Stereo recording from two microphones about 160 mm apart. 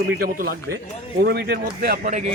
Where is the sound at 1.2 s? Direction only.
90° right; by 2.1 s 70° right (ahead or behind).